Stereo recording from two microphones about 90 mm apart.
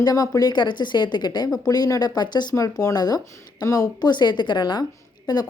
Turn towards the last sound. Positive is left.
turn(degrees=50)  # may be behind; listen again after turning